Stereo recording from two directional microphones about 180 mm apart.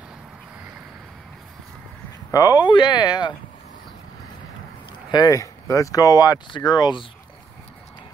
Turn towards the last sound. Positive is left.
turn(degrees=25)  # may be behind; listen again after turning